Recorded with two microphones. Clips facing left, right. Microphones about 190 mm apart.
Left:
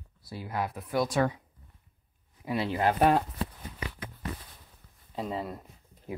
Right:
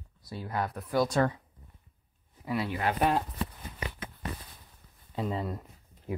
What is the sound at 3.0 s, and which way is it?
Speech, 50° left (ahead or behind).